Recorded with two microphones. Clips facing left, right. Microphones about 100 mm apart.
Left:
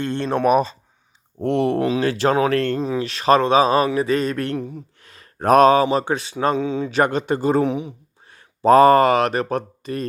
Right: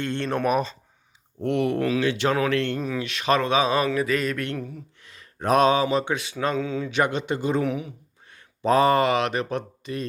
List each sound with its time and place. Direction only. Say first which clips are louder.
0.0 s speech: left 5 dB; 35° left (ahead or behind)
4.9 s speech: left 4 dB; 40° left (ahead or behind)
6.6 s speech: left 4 dB; 20° left (ahead or behind)
6.9 s speech: left 5 dB; 45° left (ahead or behind)
7.6 s a sound: left 5 dB; 25° left (ahead or behind)
8.7 s speech: left 7 dB; 45° left (ahead or behind)